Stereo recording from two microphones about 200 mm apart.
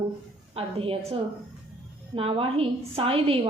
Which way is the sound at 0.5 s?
30° right (ahead or behind).